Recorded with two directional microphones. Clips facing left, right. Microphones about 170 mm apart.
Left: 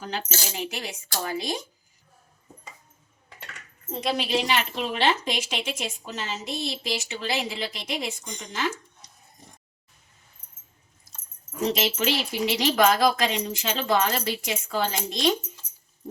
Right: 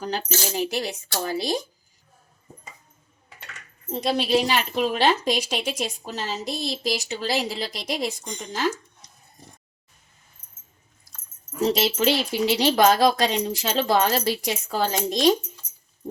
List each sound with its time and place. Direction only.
0.0 s speech: 40° right (ahead or behind)
4.0 s speech: 35° right (ahead or behind)
11.8 s speech: 35° right (ahead or behind)